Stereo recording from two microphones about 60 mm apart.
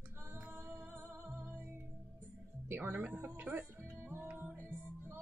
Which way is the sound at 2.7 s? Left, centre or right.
Right.